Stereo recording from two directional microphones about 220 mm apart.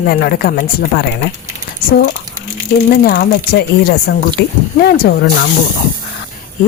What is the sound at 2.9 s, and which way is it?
Speech, 45° left (ahead or behind).